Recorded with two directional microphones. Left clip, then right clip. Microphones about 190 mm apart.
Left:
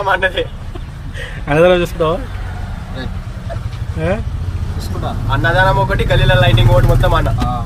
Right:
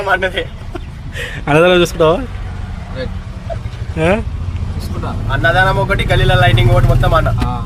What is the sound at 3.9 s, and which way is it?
Speech, 40° right (ahead or behind).